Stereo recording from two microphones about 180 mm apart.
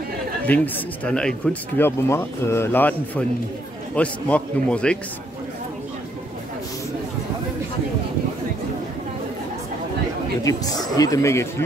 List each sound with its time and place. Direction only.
1.0 s speech: 5° left (ahead or behind)
10.4 s speech: 20° left (ahead or behind)